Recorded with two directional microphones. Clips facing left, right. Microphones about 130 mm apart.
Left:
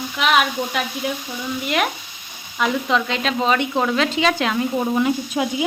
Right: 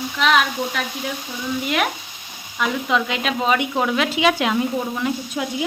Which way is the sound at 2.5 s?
Centre (ahead or behind).